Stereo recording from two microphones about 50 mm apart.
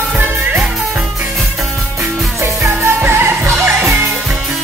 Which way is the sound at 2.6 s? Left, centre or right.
Right.